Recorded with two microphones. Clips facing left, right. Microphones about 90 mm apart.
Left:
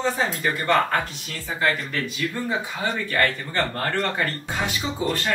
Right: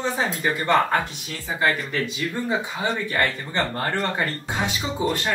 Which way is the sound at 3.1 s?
20° right (ahead or behind).